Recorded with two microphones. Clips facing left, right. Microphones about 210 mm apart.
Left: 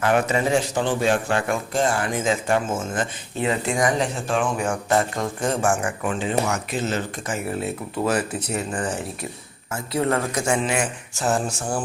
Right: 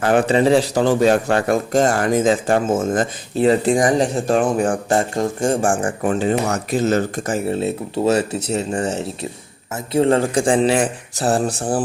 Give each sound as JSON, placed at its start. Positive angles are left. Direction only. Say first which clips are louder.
{"t": 0.0, "sound": "speech", "louder": "right 6 dB", "side_deg": -30}